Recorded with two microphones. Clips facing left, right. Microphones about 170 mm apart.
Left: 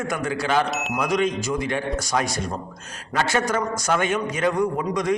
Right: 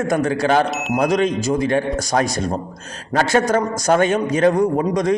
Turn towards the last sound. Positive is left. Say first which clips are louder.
# right 5 dB
turn(degrees=-35)  # may be behind; listen again after turning